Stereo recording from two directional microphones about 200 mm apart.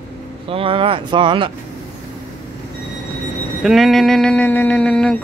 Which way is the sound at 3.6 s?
Centre (ahead or behind).